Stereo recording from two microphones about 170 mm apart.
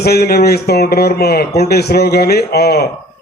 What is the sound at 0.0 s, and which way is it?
Speech, 70° left (ahead or behind).